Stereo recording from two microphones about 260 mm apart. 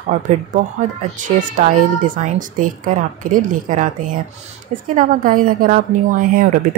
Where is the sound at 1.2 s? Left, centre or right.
Right.